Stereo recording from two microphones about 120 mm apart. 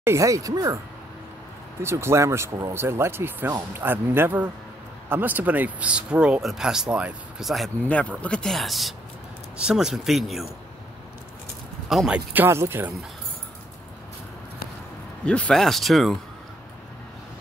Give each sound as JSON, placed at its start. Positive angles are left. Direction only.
{"t": 0.0, "sound": "speech", "side_deg": -25}
{"t": 1.8, "sound": "speech", "side_deg": -20}
{"t": 11.9, "sound": "speech", "side_deg": 0}
{"t": 12.3, "sound": "speech", "side_deg": -20}
{"t": 15.2, "sound": "speech", "side_deg": 10}